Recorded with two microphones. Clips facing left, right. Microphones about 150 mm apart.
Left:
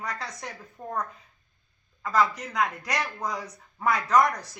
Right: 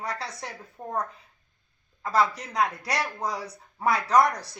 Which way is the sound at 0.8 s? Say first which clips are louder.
Even; 20° right (ahead or behind).